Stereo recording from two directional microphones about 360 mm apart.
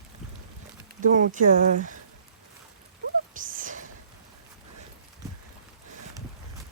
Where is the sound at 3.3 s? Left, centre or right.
Right.